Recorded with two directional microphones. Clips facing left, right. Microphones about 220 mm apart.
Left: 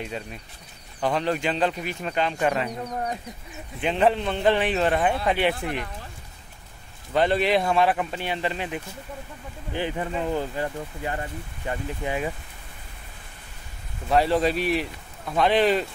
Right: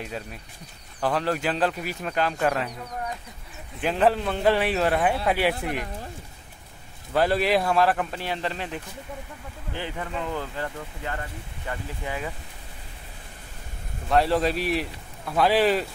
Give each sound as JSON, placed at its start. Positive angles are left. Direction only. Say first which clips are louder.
{"t": 0.0, "sound": "speech", "louder": "left 1 dB", "side_deg": 0}
{"t": 2.8, "sound": "speech", "louder": "left 4 dB", "side_deg": 40}
{"t": 3.8, "sound": "speech", "louder": "even", "side_deg": -5}
{"t": 7.1, "sound": "speech", "louder": "left 1 dB", "side_deg": -5}
{"t": 9.7, "sound": "speech", "louder": "left 5 dB", "side_deg": 15}
{"t": 14.0, "sound": "speech", "louder": "left 1 dB", "side_deg": 0}